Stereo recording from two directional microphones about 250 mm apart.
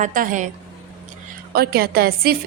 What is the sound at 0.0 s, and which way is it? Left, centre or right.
Speech, right.